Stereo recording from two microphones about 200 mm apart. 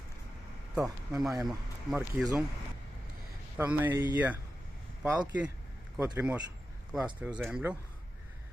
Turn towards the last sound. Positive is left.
turn(degrees=-5)  # may be behind; listen again after turning